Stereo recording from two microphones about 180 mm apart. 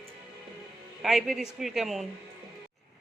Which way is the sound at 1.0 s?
Centre (ahead or behind).